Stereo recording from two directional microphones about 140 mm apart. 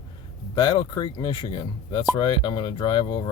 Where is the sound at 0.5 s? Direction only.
30° left (ahead or behind).